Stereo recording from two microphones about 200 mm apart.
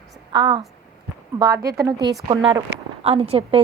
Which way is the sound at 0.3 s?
20° right (ahead or behind).